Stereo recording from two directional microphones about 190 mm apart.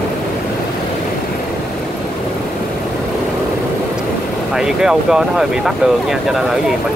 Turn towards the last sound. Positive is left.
turn(degrees=0)  # may be behind; listen again after turning